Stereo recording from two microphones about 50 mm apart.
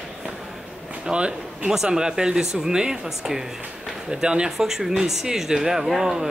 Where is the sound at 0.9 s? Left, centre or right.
Right.